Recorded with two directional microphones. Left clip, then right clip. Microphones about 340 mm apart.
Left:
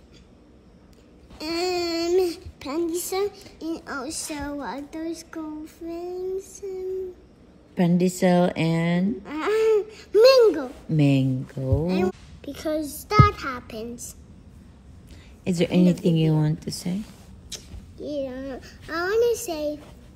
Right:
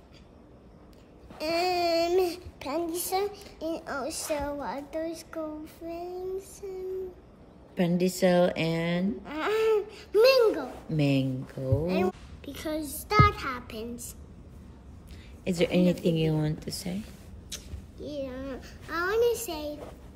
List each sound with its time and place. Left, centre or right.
1.4 s a sound: centre
3.5 s speech: centre
7.7 s speech: centre
9.2 s a child's voice: centre
10.9 s speech: centre
11.9 s a child's voice: centre
15.4 s speech: centre
17.5 s a child's voice: centre